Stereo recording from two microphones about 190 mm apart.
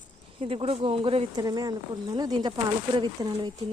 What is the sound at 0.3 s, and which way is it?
A woman's voice, 30° right (ahead or behind).